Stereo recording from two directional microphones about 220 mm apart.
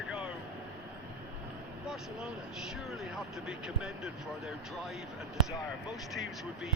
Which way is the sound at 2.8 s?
Centre (ahead or behind).